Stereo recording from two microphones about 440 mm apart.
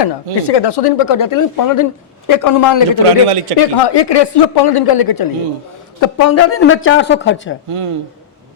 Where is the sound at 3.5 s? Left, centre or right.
Left.